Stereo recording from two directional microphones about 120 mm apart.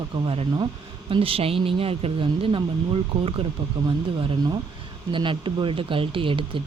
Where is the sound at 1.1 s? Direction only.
50° right (ahead or behind).